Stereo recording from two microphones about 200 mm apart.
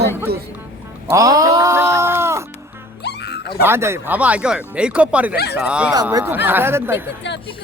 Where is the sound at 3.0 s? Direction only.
55° left (ahead or behind).